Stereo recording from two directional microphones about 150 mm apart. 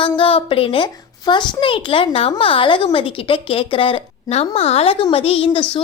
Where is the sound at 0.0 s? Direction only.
35° left (ahead or behind).